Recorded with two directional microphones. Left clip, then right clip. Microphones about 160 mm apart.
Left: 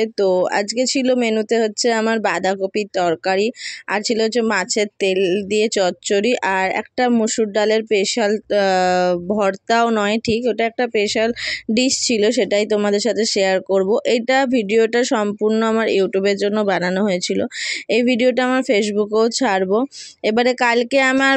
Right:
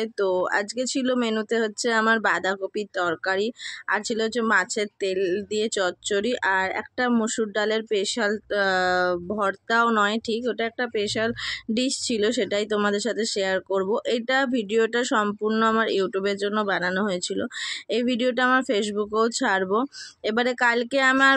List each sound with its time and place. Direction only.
0.0 s speech: 35° left (ahead or behind)